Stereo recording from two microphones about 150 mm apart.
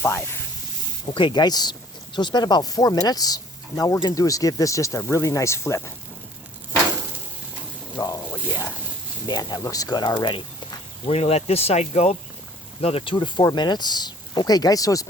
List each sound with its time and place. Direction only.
1.1 s speech: 30° left (ahead or behind)
7.9 s speech: 20° left (ahead or behind)